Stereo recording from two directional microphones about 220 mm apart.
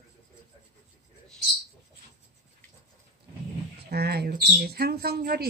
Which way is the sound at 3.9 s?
45° right (ahead or behind).